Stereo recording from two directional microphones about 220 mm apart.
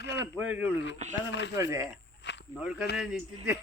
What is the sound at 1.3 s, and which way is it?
Speech, 55° left (ahead or behind).